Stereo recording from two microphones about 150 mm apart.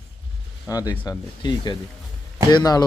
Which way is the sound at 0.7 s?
25° left (ahead or behind).